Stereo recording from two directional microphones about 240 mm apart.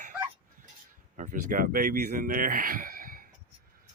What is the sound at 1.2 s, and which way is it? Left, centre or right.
Speech, right.